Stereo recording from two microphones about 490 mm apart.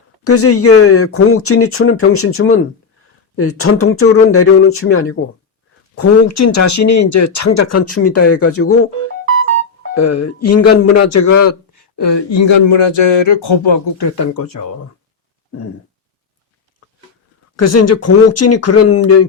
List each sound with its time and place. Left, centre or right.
0.3 s speech: left
9.9 s speech: left
11.8 s speech: left
14.3 s speech: left
17.6 s speech: left